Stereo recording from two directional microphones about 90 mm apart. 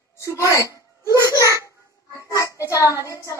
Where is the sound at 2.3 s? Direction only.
40° left (ahead or behind).